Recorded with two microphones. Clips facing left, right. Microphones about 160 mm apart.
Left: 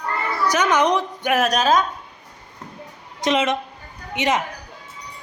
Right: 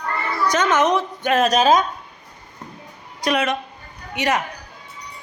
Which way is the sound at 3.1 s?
20° left (ahead or behind).